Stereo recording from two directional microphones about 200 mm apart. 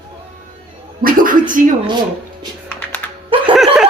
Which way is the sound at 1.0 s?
45° right (ahead or behind).